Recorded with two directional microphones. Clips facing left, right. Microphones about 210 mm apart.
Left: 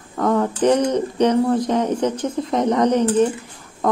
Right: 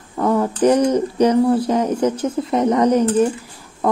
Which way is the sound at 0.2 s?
10° right (ahead or behind).